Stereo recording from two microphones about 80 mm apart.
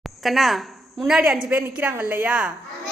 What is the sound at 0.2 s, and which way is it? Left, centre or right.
A woman's voice, centre.